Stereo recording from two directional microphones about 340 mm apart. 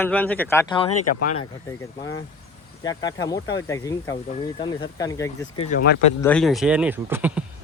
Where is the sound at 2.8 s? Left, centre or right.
Centre.